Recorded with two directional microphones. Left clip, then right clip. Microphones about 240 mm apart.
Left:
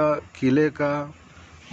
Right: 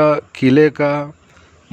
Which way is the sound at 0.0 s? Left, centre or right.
Right.